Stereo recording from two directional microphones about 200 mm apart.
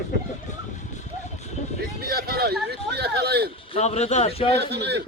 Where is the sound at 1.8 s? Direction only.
50° right (ahead or behind).